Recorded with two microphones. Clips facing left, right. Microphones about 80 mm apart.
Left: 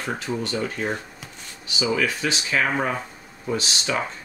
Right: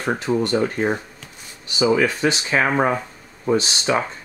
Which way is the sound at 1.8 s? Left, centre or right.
Right.